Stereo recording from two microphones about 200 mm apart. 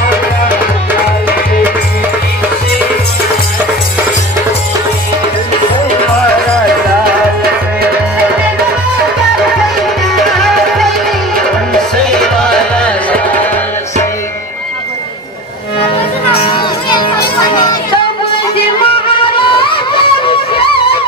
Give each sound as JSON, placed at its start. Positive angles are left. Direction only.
{"t": 10.2, "sound": "music", "side_deg": 0}
{"t": 12.0, "sound": "music", "side_deg": 5}
{"t": 19.3, "sound": "a sound", "side_deg": 25}